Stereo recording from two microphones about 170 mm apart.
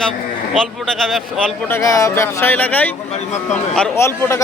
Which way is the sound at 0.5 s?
Centre (ahead or behind).